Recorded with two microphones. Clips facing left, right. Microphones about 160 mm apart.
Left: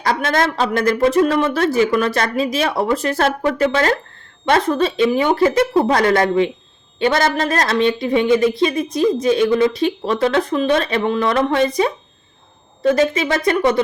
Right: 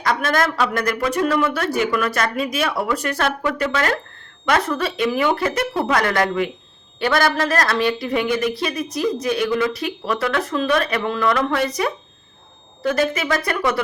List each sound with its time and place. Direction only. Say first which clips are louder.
0.0 s speech: left 2 dB; 30° left (ahead or behind)
12.9 s speech: left 4 dB; 25° left (ahead or behind)